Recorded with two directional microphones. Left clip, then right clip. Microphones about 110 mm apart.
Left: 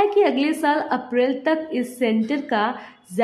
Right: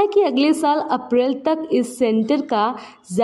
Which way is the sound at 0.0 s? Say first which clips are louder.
Right 2 dB; 45° right (ahead or behind).